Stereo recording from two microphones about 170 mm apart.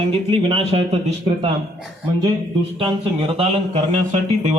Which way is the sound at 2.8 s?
35° right (ahead or behind).